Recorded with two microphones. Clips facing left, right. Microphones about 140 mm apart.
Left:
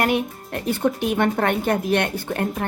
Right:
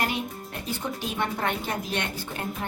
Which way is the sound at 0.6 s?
60° left (ahead or behind).